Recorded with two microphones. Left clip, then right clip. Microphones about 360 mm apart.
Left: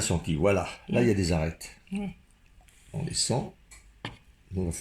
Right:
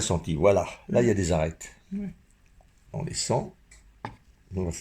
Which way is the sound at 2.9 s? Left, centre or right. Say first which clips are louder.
Left 2 dB; right.